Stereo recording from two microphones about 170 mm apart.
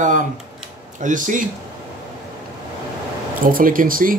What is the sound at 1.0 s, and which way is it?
Speech, 50° right (ahead or behind).